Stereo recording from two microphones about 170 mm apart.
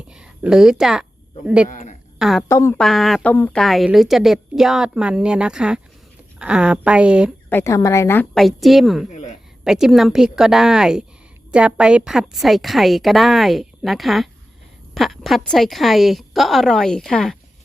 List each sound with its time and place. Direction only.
0.1 s a woman's voice: 5° right (ahead or behind)
1.7 s a woman's voice: 45° left (ahead or behind)
2.1 s speech: centre (ahead or behind)
2.5 s a woman's voice: 15° left (ahead or behind)
2.7 s a woman's voice: centre (ahead or behind)
7.5 s a woman's voice: 15° left (ahead or behind)
8.4 s a woman's voice: centre (ahead or behind)